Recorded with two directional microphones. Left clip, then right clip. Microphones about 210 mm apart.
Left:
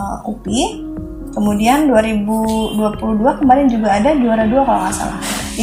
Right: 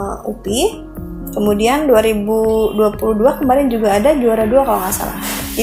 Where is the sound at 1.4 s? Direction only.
50° right (ahead or behind).